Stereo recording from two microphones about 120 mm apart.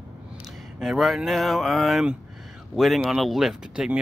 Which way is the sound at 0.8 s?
Centre (ahead or behind).